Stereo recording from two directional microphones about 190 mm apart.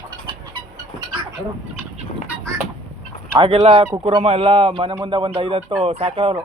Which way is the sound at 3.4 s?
30° right (ahead or behind).